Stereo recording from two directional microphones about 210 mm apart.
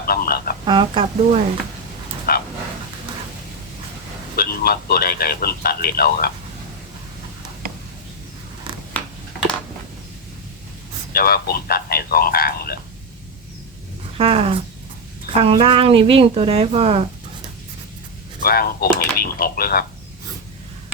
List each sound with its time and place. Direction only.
0.0 s a sound: 45° left (ahead or behind)
0.6 s speech: 20° right (ahead or behind)
2.3 s dog: 45° left (ahead or behind)
4.4 s speech: 45° left (ahead or behind)
11.1 s speech: 45° left (ahead or behind)
14.2 s speech: 25° right (ahead or behind)
18.4 s speech: 45° left (ahead or behind)